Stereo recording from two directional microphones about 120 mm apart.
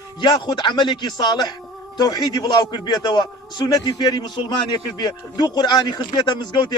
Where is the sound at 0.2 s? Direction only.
35° left (ahead or behind).